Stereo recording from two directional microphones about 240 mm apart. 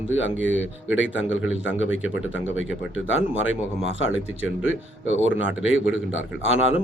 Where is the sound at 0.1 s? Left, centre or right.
Left.